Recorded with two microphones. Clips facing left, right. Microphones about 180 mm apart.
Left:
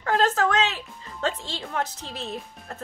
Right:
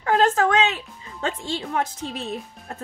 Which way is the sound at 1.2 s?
10° right (ahead or behind).